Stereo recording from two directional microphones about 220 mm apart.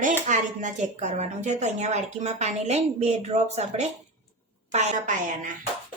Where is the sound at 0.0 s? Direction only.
35° right (ahead or behind).